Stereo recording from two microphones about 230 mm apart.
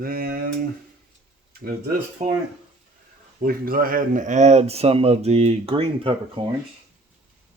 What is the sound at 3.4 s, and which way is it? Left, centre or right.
Speech, right.